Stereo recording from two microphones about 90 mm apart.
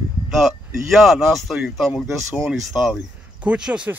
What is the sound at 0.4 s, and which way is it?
Speech, 5° right (ahead or behind).